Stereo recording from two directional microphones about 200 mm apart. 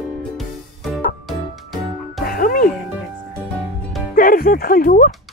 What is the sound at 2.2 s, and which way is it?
Music, 45° left (ahead or behind).